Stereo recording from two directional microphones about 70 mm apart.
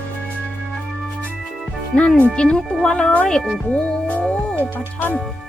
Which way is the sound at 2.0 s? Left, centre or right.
Left.